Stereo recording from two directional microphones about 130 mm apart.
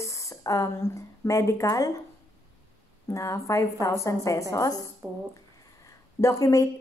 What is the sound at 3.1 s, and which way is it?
Speech, 25° left (ahead or behind).